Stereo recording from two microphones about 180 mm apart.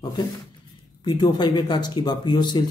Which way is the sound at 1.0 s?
25° left (ahead or behind).